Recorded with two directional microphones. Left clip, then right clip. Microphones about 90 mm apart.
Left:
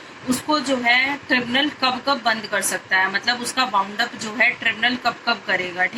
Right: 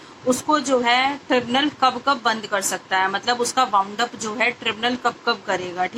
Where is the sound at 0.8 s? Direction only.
25° left (ahead or behind).